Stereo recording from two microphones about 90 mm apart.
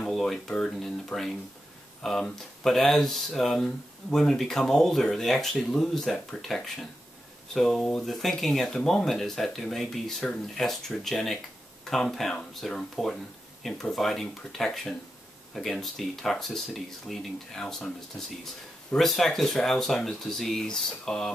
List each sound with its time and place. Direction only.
0.0 s speech: 5° left (ahead or behind)
18.9 s speech: centre (ahead or behind)